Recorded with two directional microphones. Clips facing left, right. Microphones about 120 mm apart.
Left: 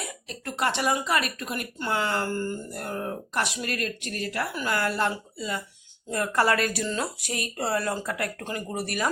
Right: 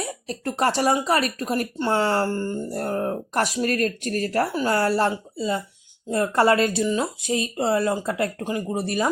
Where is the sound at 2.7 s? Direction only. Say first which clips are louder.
Right 7 dB; 35° right (ahead or behind).